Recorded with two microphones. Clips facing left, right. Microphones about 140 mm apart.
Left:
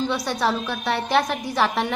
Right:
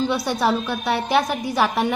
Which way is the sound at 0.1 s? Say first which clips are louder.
Right 3 dB; 10° right (ahead or behind).